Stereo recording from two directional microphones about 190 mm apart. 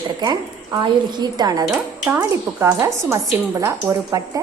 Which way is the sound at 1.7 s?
5° right (ahead or behind).